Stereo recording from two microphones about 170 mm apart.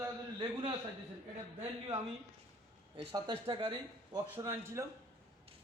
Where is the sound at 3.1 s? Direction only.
25° right (ahead or behind).